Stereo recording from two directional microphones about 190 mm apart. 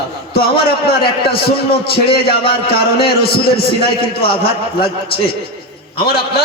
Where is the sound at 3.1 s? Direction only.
55° left (ahead or behind).